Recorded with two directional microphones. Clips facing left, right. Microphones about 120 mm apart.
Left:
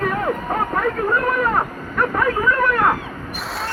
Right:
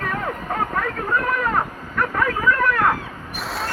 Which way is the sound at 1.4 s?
10° left (ahead or behind).